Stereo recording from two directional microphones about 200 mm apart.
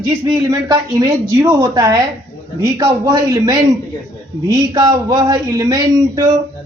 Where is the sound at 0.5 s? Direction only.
15° right (ahead or behind).